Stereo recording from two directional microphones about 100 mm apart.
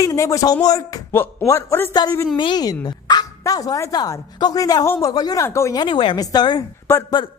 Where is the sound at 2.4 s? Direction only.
45° left (ahead or behind).